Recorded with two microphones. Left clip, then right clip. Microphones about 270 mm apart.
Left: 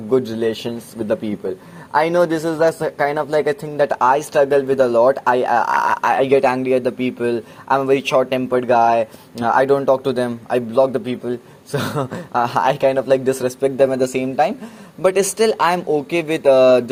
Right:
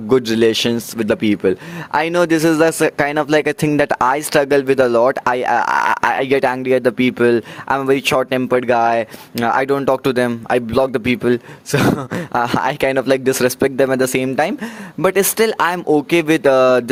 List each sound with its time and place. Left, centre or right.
0.1 s speech: right